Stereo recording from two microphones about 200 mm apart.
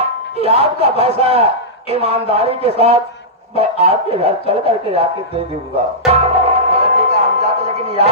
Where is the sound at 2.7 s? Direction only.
30° right (ahead or behind).